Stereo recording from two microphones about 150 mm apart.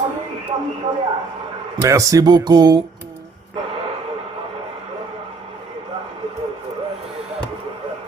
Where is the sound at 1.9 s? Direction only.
20° right (ahead or behind).